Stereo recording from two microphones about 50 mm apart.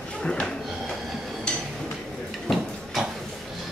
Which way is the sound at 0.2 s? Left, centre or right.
Centre.